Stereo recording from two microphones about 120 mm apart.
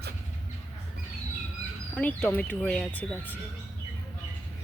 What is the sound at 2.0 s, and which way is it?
Speech, 15° left (ahead or behind).